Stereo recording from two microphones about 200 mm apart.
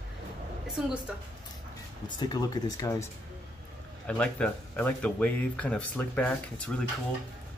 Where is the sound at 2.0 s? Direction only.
20° left (ahead or behind).